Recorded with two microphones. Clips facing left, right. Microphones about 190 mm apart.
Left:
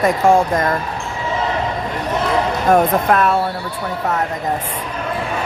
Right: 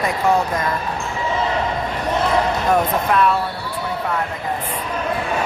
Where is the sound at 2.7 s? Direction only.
45° left (ahead or behind).